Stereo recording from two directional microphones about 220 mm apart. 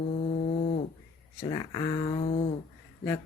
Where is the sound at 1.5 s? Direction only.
20° left (ahead or behind).